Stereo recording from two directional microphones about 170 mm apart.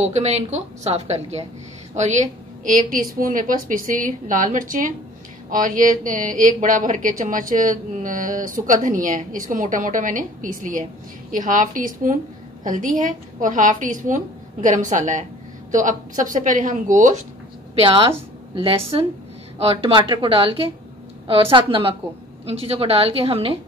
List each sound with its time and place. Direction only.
0.0 s a woman's voice: 40° right (ahead or behind)
2.6 s speech: 50° right (ahead or behind)
17.7 s a woman's voice: 30° right (ahead or behind)